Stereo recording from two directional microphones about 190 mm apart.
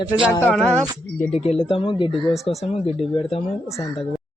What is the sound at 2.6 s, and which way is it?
Speech, 35° left (ahead or behind).